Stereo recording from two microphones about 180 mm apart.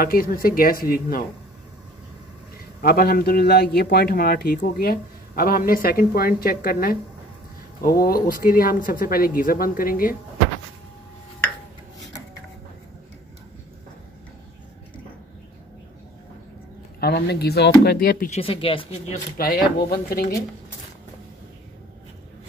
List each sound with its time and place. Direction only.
0.0 s a man's voice: 55° left (ahead or behind)
2.8 s a man's voice: 55° left (ahead or behind)
17.0 s a man's voice: 60° left (ahead or behind)
18.3 s speech: 30° left (ahead or behind)
19.3 s a man's voice: 55° left (ahead or behind)